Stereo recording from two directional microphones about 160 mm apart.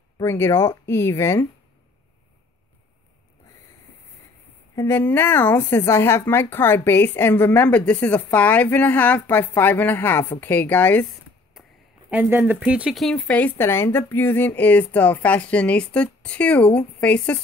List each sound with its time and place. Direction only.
0.2 s speech: 15° left (ahead or behind)
4.7 s speech: 15° left (ahead or behind)
11.6 s a sound: centre (ahead or behind)
12.1 s speech: 10° right (ahead or behind); by 17.4 s 10° left (ahead or behind)